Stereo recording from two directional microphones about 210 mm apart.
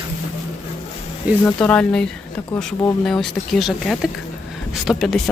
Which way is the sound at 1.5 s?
5° left (ahead or behind).